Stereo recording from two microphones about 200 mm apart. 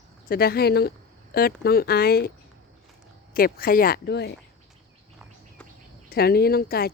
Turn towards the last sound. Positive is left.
turn(degrees=50)  # may be behind; listen again after turning